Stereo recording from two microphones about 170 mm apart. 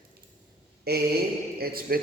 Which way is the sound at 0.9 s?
65° right (ahead or behind).